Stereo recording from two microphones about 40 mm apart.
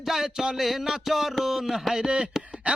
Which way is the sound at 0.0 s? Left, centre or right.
Centre.